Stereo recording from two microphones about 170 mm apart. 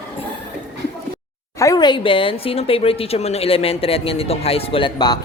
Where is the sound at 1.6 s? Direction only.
20° left (ahead or behind).